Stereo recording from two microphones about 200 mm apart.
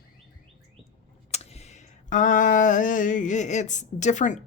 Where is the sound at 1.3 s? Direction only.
30° left (ahead or behind).